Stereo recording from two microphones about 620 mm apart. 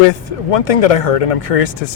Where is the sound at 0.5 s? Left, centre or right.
Left.